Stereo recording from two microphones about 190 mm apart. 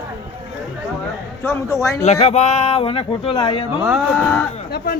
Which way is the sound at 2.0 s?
35° left (ahead or behind).